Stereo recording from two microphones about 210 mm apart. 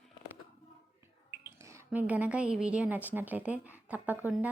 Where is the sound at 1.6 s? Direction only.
10° right (ahead or behind).